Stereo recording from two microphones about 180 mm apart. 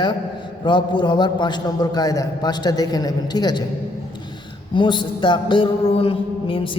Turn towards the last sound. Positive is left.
turn(degrees=30)  # may be behind; listen again after turning